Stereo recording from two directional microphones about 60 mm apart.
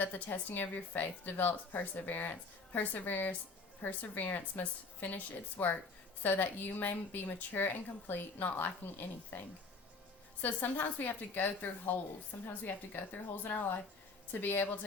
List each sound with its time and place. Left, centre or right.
0.0 s a woman's voice: left
10.4 s a woman's voice: left